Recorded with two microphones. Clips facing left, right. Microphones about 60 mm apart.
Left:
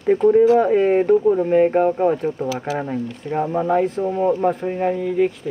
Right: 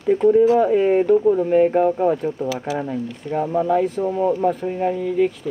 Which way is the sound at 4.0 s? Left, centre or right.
Centre.